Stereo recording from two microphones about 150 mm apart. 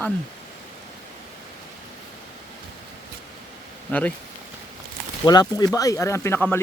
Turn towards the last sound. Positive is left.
turn(degrees=15)  # may be behind; listen again after turning